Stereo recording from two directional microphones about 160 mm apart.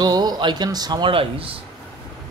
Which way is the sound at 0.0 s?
25° right (ahead or behind).